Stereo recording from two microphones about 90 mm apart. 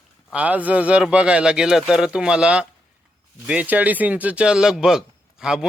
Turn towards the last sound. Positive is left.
turn(degrees=-5)  # may be behind; listen again after turning